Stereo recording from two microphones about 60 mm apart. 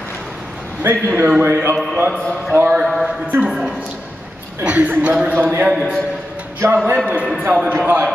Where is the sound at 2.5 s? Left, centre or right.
Right.